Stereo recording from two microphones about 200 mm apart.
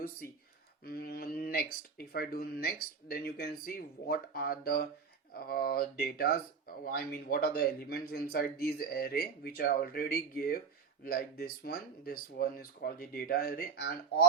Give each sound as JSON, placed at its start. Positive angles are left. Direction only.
{"t": 0.9, "sound": "speech", "side_deg": 50}